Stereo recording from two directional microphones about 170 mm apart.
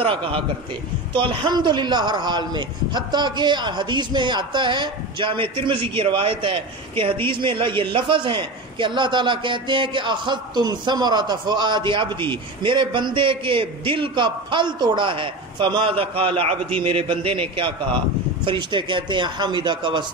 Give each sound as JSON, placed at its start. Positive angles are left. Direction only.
{"t": 0.0, "sound": "a man's voice", "side_deg": -30}